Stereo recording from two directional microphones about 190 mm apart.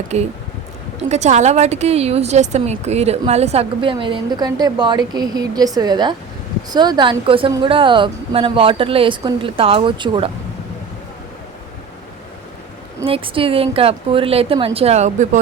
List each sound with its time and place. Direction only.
0.1 s a woman's voice: 35° right (ahead or behind)
13.1 s speech: 30° right (ahead or behind)